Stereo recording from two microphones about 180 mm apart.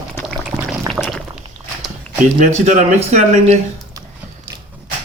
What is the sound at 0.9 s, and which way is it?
Liquid, centre (ahead or behind).